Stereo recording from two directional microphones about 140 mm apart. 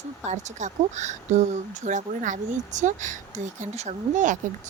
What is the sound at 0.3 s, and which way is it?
Speech, 55° right (ahead or behind).